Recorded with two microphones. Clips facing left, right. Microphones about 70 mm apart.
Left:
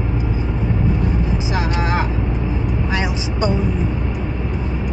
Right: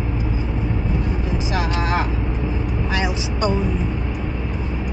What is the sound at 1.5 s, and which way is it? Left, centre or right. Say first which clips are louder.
Speech: even; centre.